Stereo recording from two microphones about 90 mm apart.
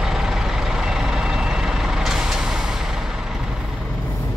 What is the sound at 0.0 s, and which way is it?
Vehicle, 5° right (ahead or behind).